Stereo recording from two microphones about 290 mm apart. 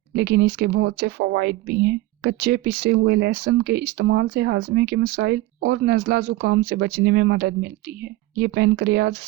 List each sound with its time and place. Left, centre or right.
0.2 s speech: right